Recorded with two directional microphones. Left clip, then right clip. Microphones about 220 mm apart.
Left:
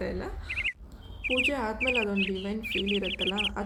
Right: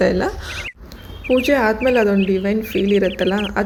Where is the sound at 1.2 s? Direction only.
Centre (ahead or behind).